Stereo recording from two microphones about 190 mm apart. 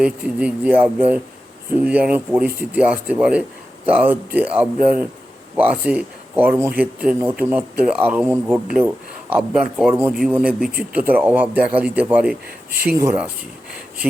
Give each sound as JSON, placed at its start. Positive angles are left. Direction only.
{"t": 0.0, "sound": "a man's voice", "side_deg": -5}